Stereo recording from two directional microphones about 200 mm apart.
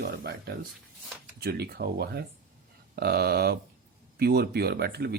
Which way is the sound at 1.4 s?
50° right (ahead or behind).